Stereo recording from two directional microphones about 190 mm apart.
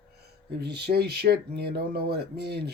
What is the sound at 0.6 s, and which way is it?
Speech, 60° right (ahead or behind).